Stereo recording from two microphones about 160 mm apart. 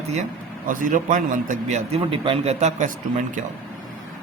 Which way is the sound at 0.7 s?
55° right (ahead or behind).